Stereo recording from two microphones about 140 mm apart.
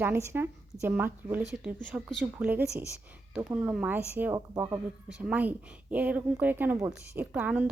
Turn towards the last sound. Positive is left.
turn(degrees=-10)  # may be behind; listen again after turning